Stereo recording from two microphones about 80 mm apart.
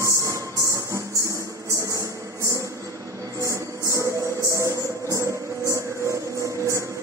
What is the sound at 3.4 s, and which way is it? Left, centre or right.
Music, right.